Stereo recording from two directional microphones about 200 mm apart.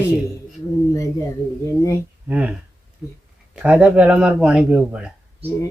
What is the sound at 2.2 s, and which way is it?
Speech, 10° right (ahead or behind).